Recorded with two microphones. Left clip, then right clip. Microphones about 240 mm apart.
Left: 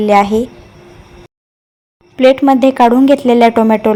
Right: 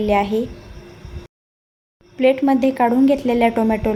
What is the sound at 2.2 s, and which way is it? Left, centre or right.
A woman's voice, centre.